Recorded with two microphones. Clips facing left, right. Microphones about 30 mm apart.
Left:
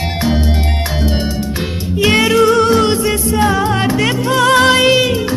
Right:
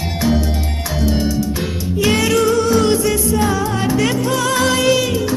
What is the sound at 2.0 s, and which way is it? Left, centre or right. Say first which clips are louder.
Music: left 4 dB; left.